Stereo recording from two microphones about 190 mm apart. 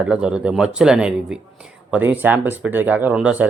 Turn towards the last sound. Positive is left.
turn(degrees=-5)  # may be behind; listen again after turning